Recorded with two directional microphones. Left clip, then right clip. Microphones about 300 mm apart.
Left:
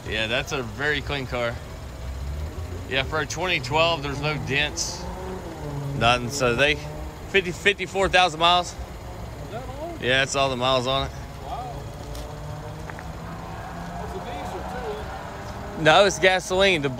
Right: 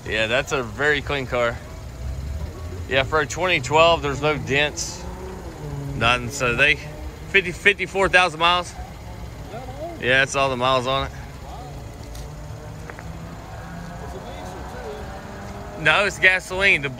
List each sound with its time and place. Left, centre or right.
0.1 s speech: centre
2.9 s speech: centre
5.9 s speech: centre
9.9 s speech: centre
15.8 s speech: centre